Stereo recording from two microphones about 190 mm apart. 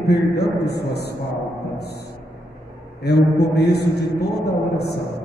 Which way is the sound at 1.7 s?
60° left (ahead or behind).